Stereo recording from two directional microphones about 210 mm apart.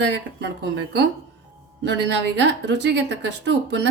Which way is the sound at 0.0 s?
55° right (ahead or behind).